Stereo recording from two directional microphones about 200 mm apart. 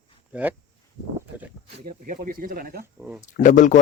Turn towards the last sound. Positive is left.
turn(degrees=40)  # may be behind; listen again after turning